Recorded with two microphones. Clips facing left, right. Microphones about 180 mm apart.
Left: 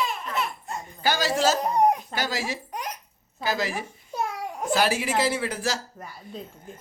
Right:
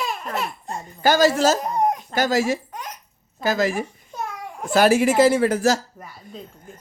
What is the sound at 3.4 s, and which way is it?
Speech, 45° right (ahead or behind).